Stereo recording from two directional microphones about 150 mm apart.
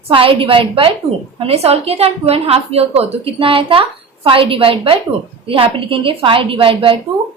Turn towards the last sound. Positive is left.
turn(degrees=-35)  # may be behind; listen again after turning